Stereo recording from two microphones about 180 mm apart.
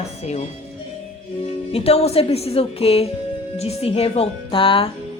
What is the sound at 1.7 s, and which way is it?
Speech, 35° left (ahead or behind).